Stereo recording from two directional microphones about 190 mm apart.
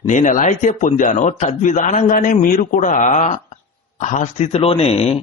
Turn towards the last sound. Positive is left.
turn(degrees=35)  # may be behind; listen again after turning